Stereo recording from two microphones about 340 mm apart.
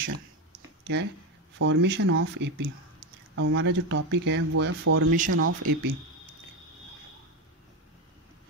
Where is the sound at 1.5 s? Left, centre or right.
Right.